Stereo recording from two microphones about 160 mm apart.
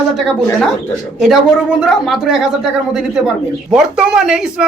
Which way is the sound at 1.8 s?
Centre (ahead or behind).